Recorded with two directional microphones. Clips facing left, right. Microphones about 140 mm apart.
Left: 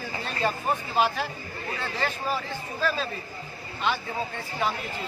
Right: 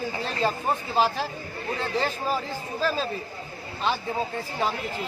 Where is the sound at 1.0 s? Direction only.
30° right (ahead or behind).